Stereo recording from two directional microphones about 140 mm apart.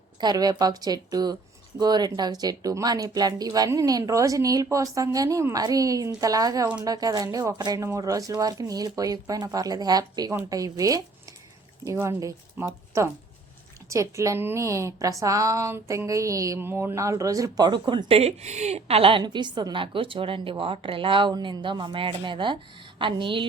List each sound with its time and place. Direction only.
0.2 s speech: 30° right (ahead or behind)
12.0 s speech: 20° right (ahead or behind)
18.2 s a woman's voice: 50° right (ahead or behind)
19.2 s a woman's voice: 30° right (ahead or behind)